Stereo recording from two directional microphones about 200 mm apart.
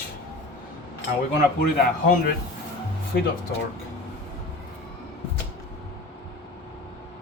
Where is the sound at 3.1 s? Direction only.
55° left (ahead or behind).